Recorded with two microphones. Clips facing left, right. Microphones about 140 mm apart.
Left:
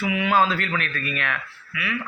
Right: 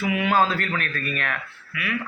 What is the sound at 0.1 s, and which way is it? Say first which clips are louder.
A man's voice: even; 45° right (ahead or behind).